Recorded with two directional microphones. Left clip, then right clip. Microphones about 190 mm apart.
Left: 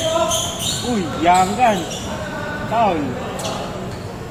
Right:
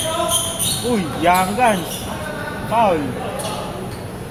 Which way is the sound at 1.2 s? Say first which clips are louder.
Left 1 dB; 65° right (ahead or behind).